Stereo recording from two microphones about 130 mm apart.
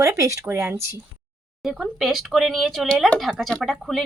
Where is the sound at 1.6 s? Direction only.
Centre (ahead or behind).